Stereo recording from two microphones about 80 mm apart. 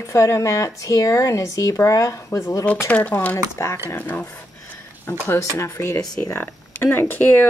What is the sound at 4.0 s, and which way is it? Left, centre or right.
Speech, left.